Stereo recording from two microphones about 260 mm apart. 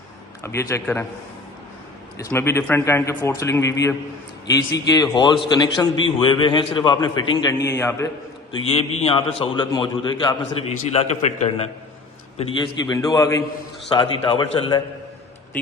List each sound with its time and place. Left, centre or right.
0.4 s a man's voice: centre
2.1 s a man's voice: centre
5.1 s a man's voice: centre
8.5 s a man's voice: left